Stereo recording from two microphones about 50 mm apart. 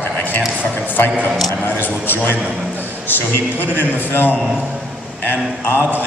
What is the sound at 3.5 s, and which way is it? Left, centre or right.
Speech, left.